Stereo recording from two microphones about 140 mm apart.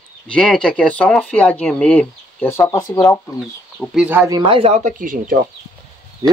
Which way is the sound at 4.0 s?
10° right (ahead or behind).